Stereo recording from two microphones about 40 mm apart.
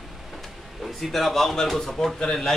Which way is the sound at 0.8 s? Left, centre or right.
Centre.